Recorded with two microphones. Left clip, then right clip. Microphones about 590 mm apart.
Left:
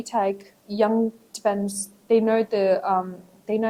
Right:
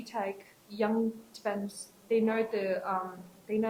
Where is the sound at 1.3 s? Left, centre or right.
Left.